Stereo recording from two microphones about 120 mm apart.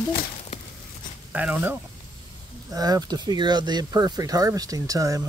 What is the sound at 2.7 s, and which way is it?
Speech, 30° right (ahead or behind).